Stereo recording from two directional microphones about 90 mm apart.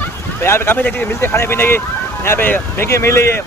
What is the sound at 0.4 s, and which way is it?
Speech, 25° left (ahead or behind).